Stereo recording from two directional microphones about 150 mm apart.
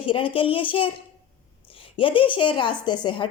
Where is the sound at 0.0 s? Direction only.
35° left (ahead or behind).